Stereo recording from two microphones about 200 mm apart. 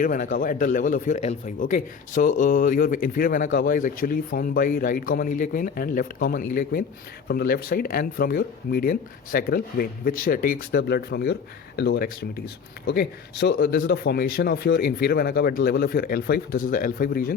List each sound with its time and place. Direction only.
0.0 s speech: 40° left (ahead or behind)